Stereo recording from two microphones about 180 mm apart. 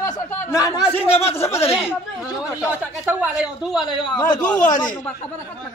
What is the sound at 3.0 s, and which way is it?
Speech, 10° right (ahead or behind).